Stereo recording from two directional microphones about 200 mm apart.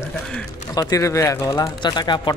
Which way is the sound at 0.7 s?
20° left (ahead or behind).